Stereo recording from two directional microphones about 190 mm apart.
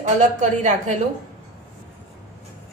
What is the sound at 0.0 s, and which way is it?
Speech, 40° right (ahead or behind).